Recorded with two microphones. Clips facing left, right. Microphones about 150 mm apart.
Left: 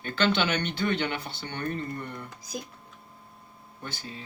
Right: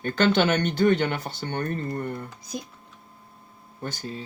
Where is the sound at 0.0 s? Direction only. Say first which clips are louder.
Right 5 dB; 45° right (ahead or behind).